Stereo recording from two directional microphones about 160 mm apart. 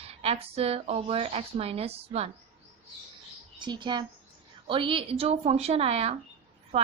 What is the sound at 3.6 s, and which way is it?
Speech, 30° right (ahead or behind).